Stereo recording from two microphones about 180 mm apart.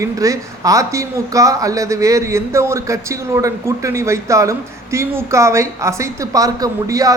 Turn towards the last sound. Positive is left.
turn(degrees=-20)  # may be behind; listen again after turning